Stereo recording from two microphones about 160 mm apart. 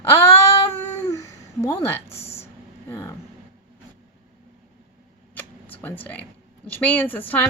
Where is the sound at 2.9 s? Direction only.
15° left (ahead or behind).